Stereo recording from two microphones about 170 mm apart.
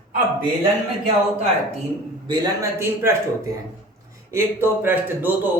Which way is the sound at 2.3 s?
15° right (ahead or behind).